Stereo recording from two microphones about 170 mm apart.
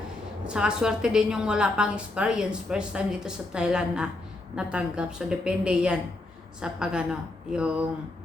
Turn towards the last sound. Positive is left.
turn(degrees=-5)  # may be behind; listen again after turning